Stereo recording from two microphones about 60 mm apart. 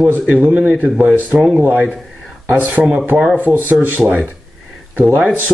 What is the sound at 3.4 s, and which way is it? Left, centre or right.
Speech, right.